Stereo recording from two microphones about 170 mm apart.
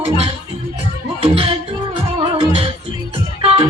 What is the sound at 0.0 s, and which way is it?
Music, 35° right (ahead or behind).